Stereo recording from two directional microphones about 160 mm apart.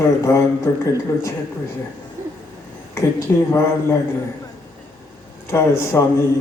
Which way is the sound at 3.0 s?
15° left (ahead or behind).